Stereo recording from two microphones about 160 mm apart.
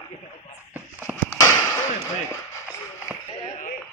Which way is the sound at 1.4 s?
20° left (ahead or behind).